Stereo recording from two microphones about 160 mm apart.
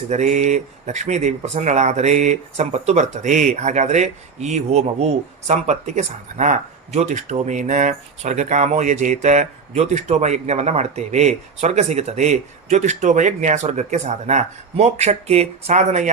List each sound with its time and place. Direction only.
0.1 s speech: 50° right (ahead or behind)